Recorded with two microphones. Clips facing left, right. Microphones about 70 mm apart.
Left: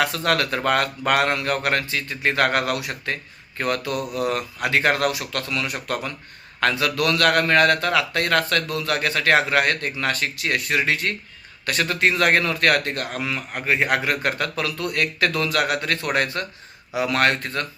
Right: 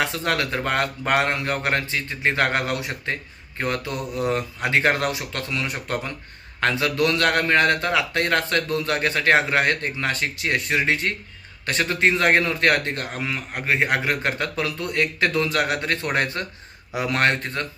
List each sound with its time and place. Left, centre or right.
0.3 s a man's voice: right